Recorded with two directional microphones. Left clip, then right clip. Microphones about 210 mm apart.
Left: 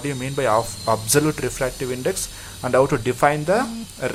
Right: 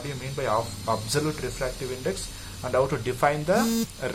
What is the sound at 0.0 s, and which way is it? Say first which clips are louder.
Speech: left 8 dB; 40° left (ahead or behind).